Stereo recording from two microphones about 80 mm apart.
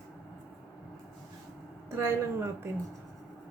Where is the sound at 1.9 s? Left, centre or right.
Right.